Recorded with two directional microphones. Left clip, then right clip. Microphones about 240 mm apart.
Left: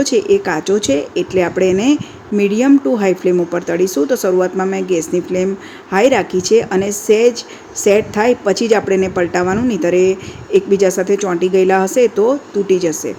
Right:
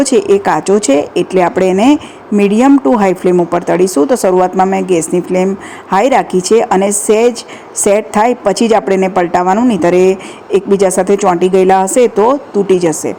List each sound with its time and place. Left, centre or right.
0.0 s a woman's voice: centre
5.9 s a woman's voice: centre